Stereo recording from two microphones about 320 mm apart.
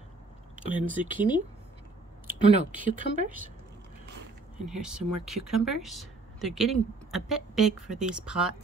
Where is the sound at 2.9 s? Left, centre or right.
Right.